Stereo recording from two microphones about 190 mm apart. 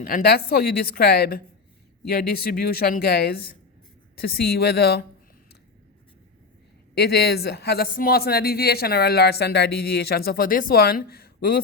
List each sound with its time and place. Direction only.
0.0 s a woman's voice: 50° left (ahead or behind)
6.9 s speech: 60° left (ahead or behind)